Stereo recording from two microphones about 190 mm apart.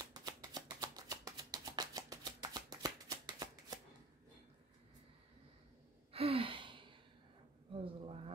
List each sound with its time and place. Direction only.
0.0 s shuffling cards: 20° right (ahead or behind)
6.1 s gasp: 30° right (ahead or behind)
7.7 s a sound: 30° right (ahead or behind)